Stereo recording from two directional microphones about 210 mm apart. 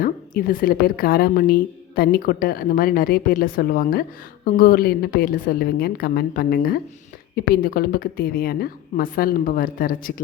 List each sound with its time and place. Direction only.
0.0 s a woman's voice: 45° left (ahead or behind)